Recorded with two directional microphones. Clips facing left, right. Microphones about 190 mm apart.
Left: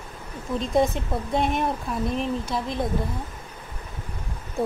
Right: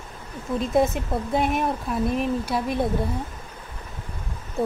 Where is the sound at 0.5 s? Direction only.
5° right (ahead or behind).